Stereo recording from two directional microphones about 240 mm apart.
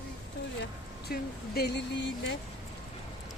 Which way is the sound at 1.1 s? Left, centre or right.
Left.